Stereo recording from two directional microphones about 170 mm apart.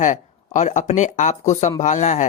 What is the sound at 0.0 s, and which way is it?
Speech, 45° left (ahead or behind).